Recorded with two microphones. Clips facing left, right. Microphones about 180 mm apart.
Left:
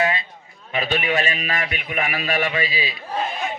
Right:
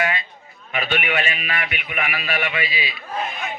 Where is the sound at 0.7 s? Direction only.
30° left (ahead or behind).